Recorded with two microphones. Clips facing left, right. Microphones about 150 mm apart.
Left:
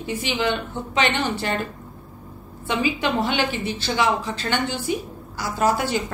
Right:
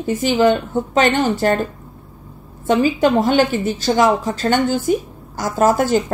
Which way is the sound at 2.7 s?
40° right (ahead or behind).